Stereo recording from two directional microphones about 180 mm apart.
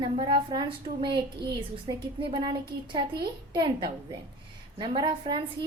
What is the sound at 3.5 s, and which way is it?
A woman's voice, 25° right (ahead or behind).